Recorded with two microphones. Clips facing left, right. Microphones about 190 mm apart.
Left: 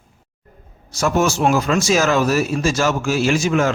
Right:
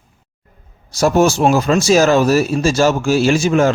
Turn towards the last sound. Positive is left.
turn(degrees=-30)  # may be behind; listen again after turning